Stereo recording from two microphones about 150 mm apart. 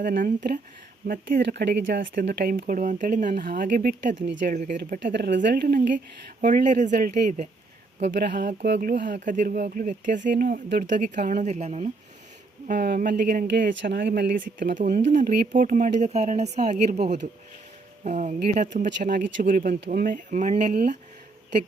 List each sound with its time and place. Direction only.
0.0 s speech: 70° right (ahead or behind)
1.0 s speech: 80° right; by 6.9 s 55° right (ahead or behind)
6.9 s speech: 75° right (ahead or behind)
8.2 s speech: 90° right; by 11.9 s 45° right (ahead or behind)
12.6 s speech: 80° right; by 18.3 s 55° right (ahead or behind)
18.3 s speech: 90° right
18.6 s speech: 70° right (ahead or behind)